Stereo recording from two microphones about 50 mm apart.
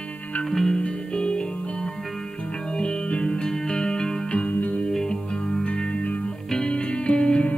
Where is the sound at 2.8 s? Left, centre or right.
Left.